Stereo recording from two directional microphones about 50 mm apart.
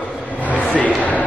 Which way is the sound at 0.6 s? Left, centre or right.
Left.